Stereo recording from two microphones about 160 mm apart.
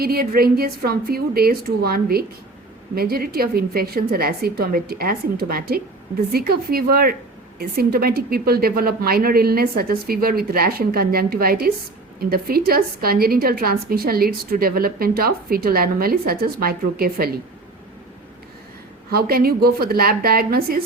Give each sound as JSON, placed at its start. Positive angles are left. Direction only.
{"t": 0.0, "sound": "a woman's voice", "side_deg": -70}
{"t": 19.1, "sound": "a woman's voice", "side_deg": -70}